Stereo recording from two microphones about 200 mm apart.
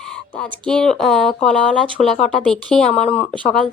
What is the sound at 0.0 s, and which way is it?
Speech, 5° left (ahead or behind).